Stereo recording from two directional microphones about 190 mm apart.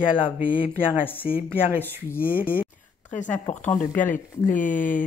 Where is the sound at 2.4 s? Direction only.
50° left (ahead or behind).